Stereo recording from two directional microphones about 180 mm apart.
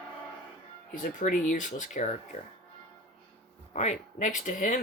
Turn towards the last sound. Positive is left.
turn(degrees=45)  # may be behind; listen again after turning